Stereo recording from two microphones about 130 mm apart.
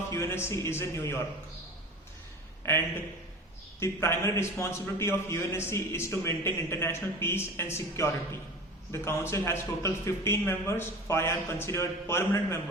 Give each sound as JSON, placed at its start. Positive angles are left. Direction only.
{"t": 0.1, "sound": "a man's voice", "side_deg": 20}
{"t": 2.6, "sound": "a man's voice", "side_deg": 20}